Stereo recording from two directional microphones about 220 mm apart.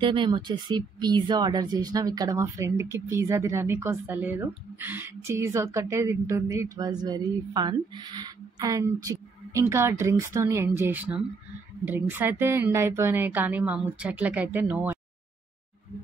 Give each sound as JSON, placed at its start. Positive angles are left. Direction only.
{"t": 0.0, "sound": "speech", "side_deg": -20}